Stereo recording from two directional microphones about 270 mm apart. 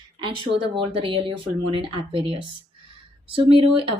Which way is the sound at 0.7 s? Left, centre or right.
Centre.